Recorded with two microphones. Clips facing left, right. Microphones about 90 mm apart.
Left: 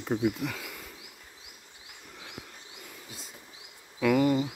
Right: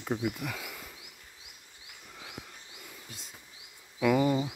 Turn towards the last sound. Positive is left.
turn(degrees=-15)  # may be behind; listen again after turning